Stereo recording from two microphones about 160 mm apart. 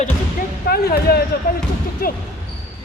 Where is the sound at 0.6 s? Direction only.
70° left (ahead or behind).